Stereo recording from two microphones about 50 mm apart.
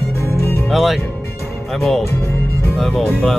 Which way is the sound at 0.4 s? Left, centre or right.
Left.